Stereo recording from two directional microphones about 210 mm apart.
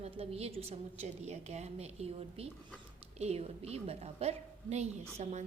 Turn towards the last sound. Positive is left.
turn(degrees=-35)  # may be behind; listen again after turning